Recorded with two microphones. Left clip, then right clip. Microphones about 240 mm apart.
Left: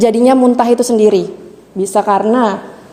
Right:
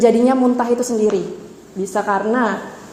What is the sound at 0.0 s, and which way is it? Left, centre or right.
A woman's voice, left.